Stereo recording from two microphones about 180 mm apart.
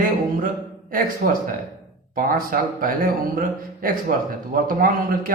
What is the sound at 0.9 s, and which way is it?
A man's voice, 50° right (ahead or behind).